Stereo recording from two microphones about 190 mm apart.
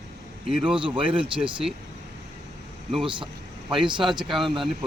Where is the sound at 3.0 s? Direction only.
25° right (ahead or behind).